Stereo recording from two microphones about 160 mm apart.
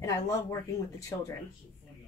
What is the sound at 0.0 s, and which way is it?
Speech, 20° left (ahead or behind).